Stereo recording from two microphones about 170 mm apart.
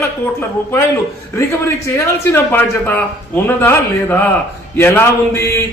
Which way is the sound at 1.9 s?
15° left (ahead or behind).